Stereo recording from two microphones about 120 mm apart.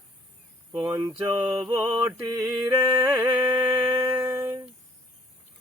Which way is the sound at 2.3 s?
30° right (ahead or behind).